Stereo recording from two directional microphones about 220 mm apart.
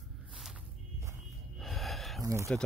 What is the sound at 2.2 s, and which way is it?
Speech, 15° right (ahead or behind).